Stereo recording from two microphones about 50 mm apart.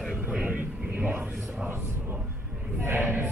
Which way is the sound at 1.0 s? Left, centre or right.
Right.